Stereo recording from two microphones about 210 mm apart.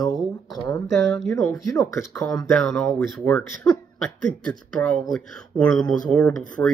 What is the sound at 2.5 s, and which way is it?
Speech, 5° left (ahead or behind).